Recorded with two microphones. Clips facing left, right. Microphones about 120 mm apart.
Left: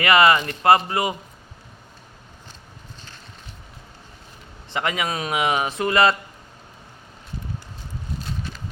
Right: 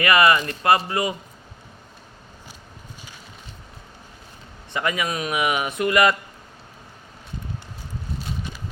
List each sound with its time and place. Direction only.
0.0 s speech: 25° left (ahead or behind)
4.7 s speech: 25° left (ahead or behind)